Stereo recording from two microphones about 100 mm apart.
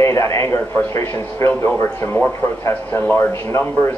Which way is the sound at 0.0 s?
30° left (ahead or behind).